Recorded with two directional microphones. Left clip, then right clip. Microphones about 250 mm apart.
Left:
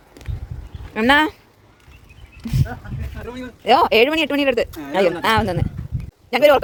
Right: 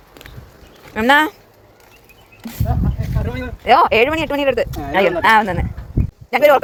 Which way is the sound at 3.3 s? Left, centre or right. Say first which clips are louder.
Right 2 dB; left.